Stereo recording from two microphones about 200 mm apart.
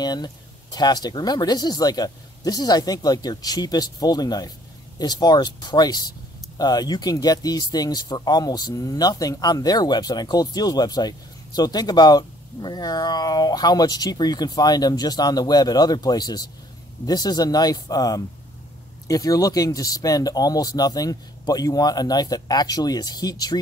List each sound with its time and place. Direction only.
0.0 s speech: 20° left (ahead or behind)